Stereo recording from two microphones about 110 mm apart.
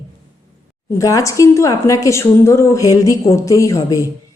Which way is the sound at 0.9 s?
30° left (ahead or behind).